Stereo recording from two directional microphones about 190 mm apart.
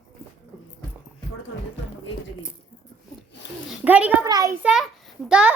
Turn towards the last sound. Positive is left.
turn(degrees=-5)  # may be behind; listen again after turning